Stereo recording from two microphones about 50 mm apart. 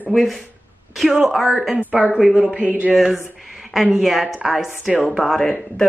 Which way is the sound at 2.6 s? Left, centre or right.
Right.